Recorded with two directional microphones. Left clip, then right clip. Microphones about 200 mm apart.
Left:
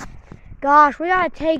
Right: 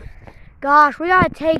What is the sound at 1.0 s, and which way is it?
Speech, 15° right (ahead or behind).